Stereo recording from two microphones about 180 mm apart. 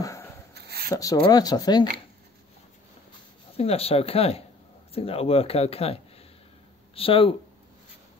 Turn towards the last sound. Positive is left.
turn(degrees=30)  # may be behind; listen again after turning